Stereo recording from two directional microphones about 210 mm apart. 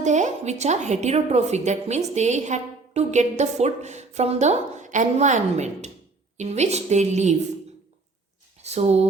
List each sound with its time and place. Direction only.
0.0 s a woman's voice: 35° right (ahead or behind)
8.6 s a woman's voice: 30° right (ahead or behind)